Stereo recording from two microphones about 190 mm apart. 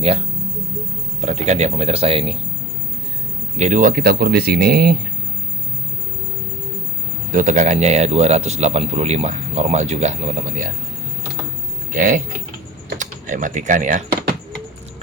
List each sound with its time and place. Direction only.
1.2 s speech: 35° right (ahead or behind)
3.6 s speech: 40° right (ahead or behind)
7.3 s speech: 40° right (ahead or behind)
11.9 s speech: 45° right (ahead or behind)